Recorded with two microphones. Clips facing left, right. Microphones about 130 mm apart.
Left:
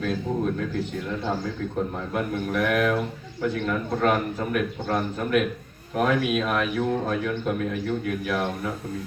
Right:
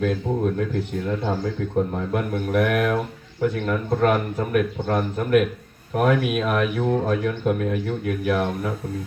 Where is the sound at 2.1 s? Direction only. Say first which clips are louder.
Right 3 dB; 55° right (ahead or behind).